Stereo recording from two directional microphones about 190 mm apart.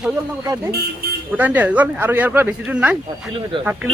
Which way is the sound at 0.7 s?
55° right (ahead or behind).